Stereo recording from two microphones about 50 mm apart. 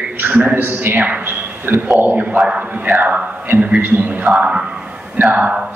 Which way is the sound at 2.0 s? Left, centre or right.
Right.